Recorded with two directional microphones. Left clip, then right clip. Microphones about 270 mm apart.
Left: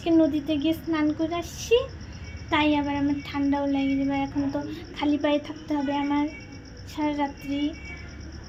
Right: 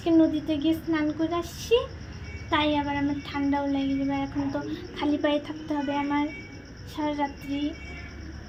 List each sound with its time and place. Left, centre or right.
0.0 s speech: centre